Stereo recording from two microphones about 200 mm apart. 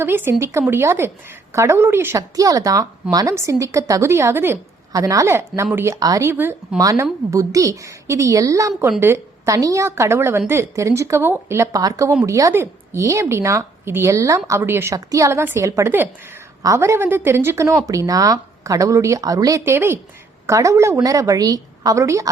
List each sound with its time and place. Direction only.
0.0 s speech: 10° right (ahead or behind)